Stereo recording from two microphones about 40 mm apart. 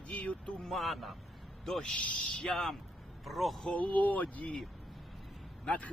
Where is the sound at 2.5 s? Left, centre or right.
Centre.